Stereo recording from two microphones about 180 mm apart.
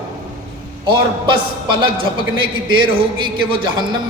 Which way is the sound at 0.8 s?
25° right (ahead or behind).